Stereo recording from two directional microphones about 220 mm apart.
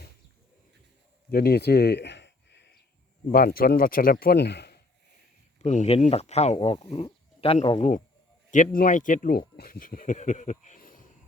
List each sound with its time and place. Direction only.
1.3 s a sound: 45° left (ahead or behind)
3.3 s speech: 40° left (ahead or behind)
5.5 s speech: 30° left (ahead or behind)